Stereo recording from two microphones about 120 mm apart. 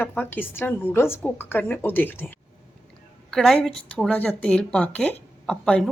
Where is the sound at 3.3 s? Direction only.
5° left (ahead or behind).